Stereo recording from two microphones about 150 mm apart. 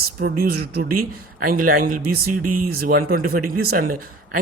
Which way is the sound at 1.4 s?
70° right (ahead or behind).